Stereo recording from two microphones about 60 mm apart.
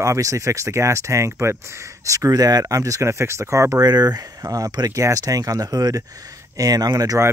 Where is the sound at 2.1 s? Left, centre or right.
Right.